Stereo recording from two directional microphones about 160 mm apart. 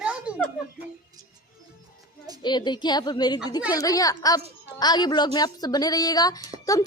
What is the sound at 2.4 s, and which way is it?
A woman's voice, 30° left (ahead or behind).